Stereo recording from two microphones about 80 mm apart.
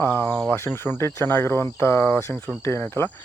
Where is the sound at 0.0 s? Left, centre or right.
Left.